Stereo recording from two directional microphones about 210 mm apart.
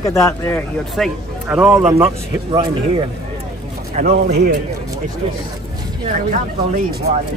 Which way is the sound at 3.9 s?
50° right (ahead or behind).